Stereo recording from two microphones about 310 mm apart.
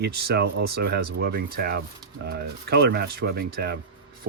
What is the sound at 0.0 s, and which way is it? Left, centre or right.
Speech, right.